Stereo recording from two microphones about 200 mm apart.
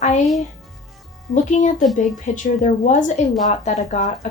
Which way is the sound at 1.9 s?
40° left (ahead or behind).